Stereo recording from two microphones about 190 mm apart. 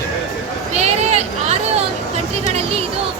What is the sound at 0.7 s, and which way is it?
A woman's voice, 35° right (ahead or behind).